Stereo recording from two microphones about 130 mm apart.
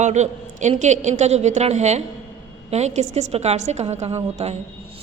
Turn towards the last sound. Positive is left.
turn(degrees=-55)  # may be behind; listen again after turning